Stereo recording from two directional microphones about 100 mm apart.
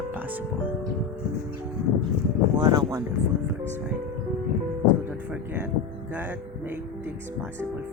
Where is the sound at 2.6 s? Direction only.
40° right (ahead or behind).